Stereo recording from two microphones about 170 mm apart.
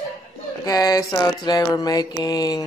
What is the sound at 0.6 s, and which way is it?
Speech, 20° left (ahead or behind).